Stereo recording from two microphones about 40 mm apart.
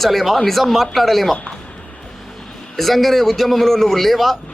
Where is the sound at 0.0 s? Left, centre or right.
Centre.